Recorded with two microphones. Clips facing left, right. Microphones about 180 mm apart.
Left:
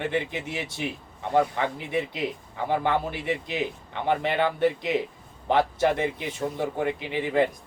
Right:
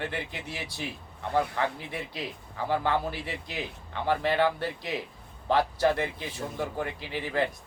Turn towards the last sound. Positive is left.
turn(degrees=20)  # may be behind; listen again after turning